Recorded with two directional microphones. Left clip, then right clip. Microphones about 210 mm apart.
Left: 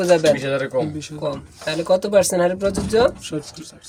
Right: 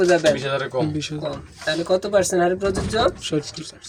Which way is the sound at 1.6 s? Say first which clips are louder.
Left 2 dB; 55° left (ahead or behind).